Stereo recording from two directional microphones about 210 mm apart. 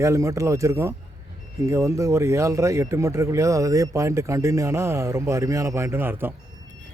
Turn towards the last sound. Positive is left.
turn(degrees=-10)  # may be behind; listen again after turning